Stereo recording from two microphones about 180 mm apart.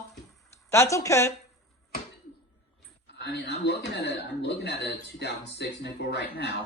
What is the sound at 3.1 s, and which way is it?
Speech, 70° left (ahead or behind).